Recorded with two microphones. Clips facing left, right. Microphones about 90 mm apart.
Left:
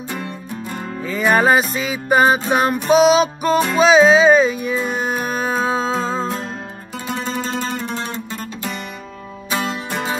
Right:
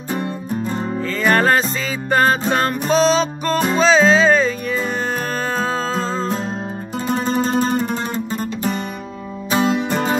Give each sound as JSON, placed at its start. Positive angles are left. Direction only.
{"t": 0.5, "sound": "music", "side_deg": -30}
{"t": 1.0, "sound": "music", "side_deg": 10}
{"t": 7.1, "sound": "music", "side_deg": -35}
{"t": 9.5, "sound": "music", "side_deg": -25}